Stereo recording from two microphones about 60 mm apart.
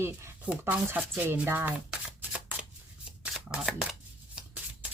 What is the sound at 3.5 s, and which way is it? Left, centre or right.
Chopping, centre.